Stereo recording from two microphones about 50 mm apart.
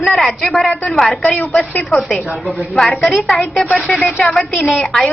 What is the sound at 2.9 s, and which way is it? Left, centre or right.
A woman's voice, centre.